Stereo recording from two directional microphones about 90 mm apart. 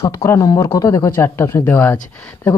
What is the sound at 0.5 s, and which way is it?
Speech, 45° left (ahead or behind).